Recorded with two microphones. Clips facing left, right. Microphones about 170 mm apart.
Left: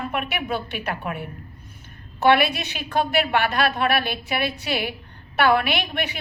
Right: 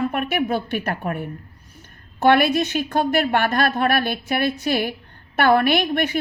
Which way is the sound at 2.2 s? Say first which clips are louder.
Right 3 dB; 45° right (ahead or behind).